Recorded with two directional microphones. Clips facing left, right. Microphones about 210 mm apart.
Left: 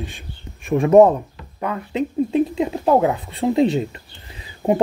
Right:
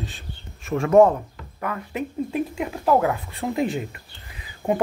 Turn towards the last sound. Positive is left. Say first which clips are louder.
# left 4 dB
turn(degrees=25)  # may be behind; listen again after turning